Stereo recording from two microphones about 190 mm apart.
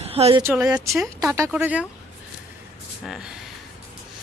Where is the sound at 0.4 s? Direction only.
5° right (ahead or behind).